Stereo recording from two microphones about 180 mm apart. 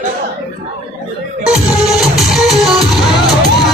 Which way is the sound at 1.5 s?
Centre (ahead or behind).